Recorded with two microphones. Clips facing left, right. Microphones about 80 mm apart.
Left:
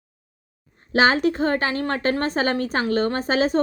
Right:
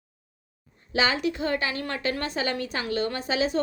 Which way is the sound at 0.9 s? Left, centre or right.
Left.